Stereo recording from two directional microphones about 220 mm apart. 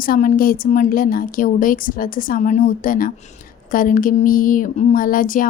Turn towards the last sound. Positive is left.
turn(degrees=40)  # may be behind; listen again after turning